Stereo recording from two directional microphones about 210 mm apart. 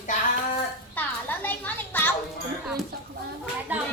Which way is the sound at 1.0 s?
10° left (ahead or behind).